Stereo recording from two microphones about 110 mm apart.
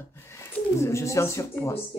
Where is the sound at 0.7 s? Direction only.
25° left (ahead or behind).